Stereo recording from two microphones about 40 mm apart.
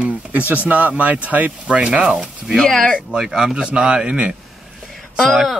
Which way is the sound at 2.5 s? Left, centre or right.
Centre.